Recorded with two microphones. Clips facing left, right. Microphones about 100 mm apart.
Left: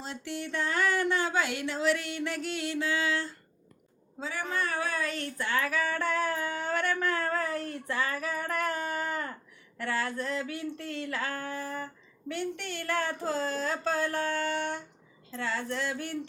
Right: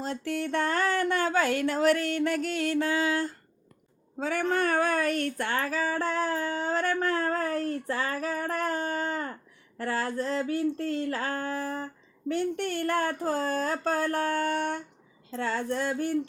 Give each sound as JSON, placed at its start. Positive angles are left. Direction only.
{"t": 0.0, "sound": "speech", "side_deg": -45}
{"t": 4.2, "sound": "speech", "side_deg": -55}
{"t": 5.6, "sound": "a sound", "side_deg": -35}
{"t": 12.3, "sound": "speech", "side_deg": -40}